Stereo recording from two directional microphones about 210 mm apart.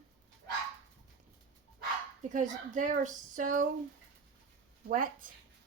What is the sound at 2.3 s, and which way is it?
A woman's voice, 35° right (ahead or behind).